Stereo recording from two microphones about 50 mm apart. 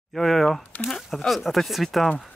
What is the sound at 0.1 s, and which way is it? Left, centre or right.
Speech, centre.